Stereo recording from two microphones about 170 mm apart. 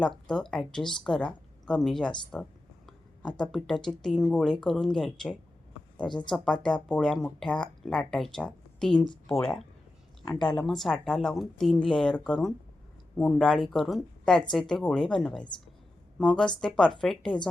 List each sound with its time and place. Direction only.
0.3 s speech: 5° left (ahead or behind)
10.2 s a woman's voice: 25° left (ahead or behind)
10.6 s speech: centre (ahead or behind)